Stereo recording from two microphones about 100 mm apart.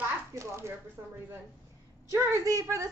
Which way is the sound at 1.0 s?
30° right (ahead or behind).